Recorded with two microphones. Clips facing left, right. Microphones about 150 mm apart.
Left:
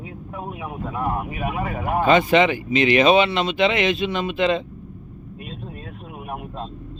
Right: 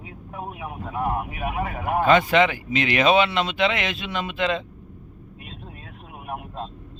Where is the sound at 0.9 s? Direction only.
15° right (ahead or behind).